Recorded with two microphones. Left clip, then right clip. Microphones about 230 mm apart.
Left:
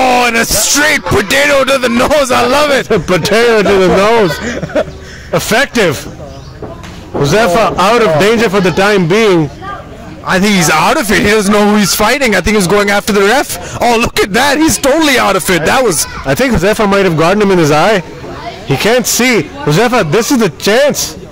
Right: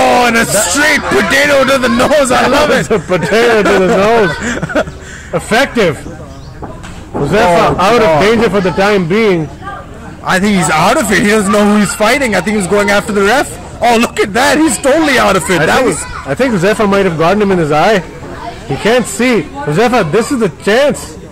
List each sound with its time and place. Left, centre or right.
0.1 s speech: left
4.5 s a sound: centre
5.3 s speech: left
7.2 s speech: left
10.4 s speech: left